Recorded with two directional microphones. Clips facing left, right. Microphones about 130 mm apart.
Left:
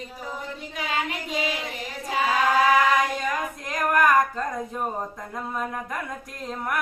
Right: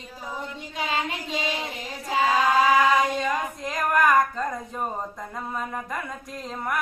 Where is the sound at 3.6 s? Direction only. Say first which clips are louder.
Left 1 dB; centre (ahead or behind).